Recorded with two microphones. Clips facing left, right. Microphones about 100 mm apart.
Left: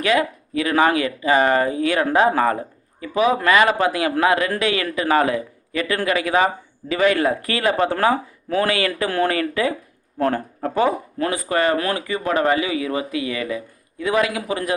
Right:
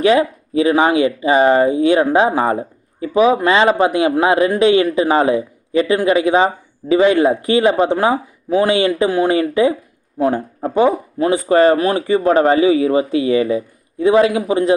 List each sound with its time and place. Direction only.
0.0 s speech: 25° right (ahead or behind)